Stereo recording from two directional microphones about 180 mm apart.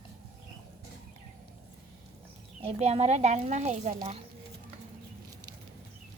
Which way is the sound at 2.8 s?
35° right (ahead or behind).